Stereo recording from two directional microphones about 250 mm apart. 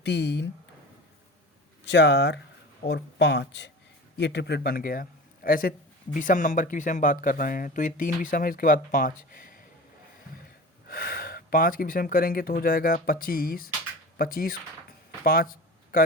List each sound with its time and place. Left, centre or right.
0.0 s speech: left
1.8 s a man's voice: left
10.8 s speech: left
15.2 s a sound: left